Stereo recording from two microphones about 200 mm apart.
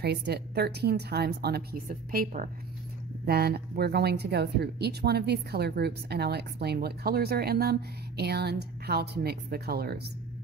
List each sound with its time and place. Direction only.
0.0 s speech: 55° right (ahead or behind)